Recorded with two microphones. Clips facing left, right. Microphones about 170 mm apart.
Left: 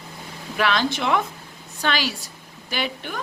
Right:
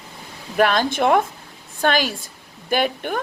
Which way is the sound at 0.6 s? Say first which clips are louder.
Right 5 dB; 45° right (ahead or behind).